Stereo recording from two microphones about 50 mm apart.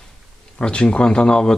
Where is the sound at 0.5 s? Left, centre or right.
Centre.